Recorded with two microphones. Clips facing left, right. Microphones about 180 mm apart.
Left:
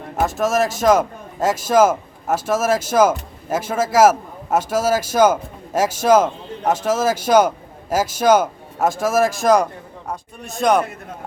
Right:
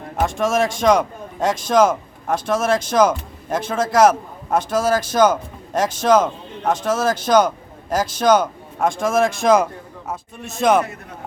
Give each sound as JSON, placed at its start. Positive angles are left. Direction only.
{"t": 0.2, "sound": "a man's voice", "side_deg": 5}